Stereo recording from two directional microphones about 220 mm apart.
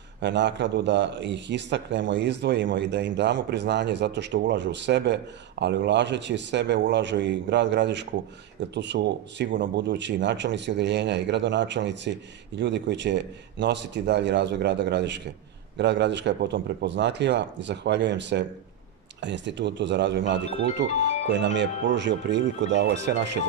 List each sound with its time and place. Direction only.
0.2 s a man's voice: 55° right (ahead or behind)